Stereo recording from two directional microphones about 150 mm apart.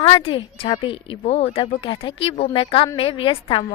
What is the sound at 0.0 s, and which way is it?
Speech, 35° left (ahead or behind).